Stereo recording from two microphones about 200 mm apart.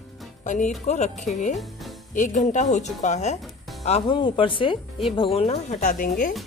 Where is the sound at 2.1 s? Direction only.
40° left (ahead or behind).